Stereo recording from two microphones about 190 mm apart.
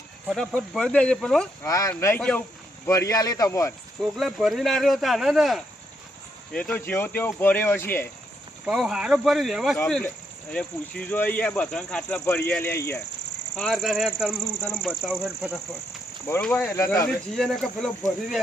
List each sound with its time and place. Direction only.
0.3 s speech: centre (ahead or behind)
1.6 s speech: 15° left (ahead or behind)
4.0 s speech: centre (ahead or behind)
8.6 s speech: centre (ahead or behind)
13.6 s speech: centre (ahead or behind)
16.2 s speech: 10° left (ahead or behind)
17.3 s speech: centre (ahead or behind)